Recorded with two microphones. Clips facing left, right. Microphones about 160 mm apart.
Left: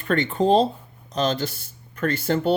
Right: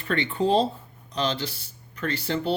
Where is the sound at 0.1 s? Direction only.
45° left (ahead or behind).